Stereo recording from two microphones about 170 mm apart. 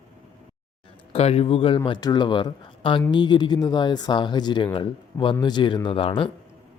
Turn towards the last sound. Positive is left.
turn(degrees=30)  # may be behind; listen again after turning